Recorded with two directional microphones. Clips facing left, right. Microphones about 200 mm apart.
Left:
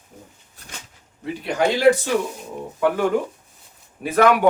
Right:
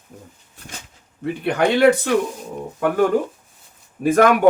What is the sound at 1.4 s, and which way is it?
Speech, 60° right (ahead or behind).